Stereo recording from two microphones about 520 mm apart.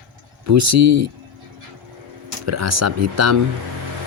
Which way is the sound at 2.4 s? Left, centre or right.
Right.